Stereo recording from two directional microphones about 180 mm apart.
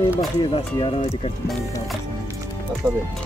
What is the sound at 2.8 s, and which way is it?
Speech, 20° right (ahead or behind).